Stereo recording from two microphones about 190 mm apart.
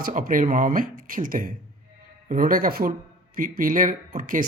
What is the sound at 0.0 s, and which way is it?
Speech, 45° right (ahead or behind).